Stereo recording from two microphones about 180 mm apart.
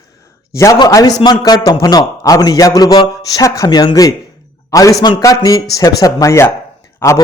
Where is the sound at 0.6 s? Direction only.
20° left (ahead or behind).